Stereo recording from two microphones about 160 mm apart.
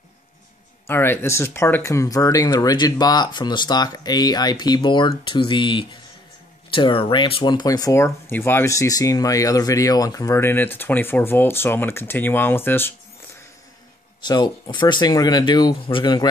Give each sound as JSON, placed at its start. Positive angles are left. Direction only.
{"t": 0.8, "sound": "speech", "side_deg": 15}
{"t": 14.2, "sound": "speech", "side_deg": 30}